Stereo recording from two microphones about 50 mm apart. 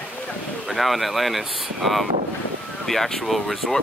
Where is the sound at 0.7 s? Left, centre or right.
Centre.